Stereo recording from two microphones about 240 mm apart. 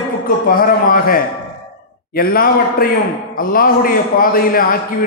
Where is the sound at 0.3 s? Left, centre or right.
Left.